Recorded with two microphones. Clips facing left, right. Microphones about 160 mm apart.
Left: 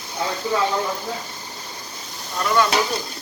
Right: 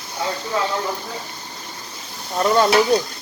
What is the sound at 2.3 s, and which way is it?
Stir, 35° right (ahead or behind).